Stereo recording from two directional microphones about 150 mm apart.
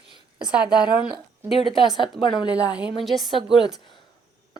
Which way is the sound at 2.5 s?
10° right (ahead or behind).